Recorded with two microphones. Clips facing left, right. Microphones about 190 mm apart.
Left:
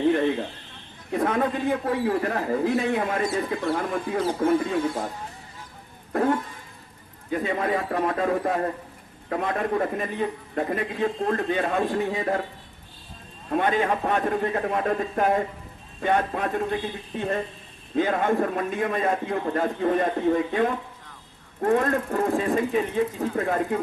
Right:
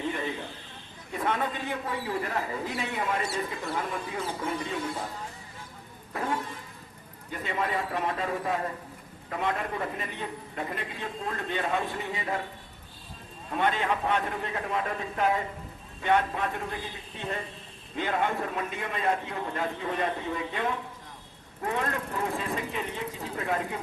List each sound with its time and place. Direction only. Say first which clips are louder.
0.0 s a sound: left 11 dB; 75° left (ahead or behind)
1.1 s a man's voice: left 6 dB; 55° left (ahead or behind)
6.1 s a man's voice: left 8 dB; 50° left (ahead or behind)
13.5 s a man's voice: left 5 dB; 50° left (ahead or behind)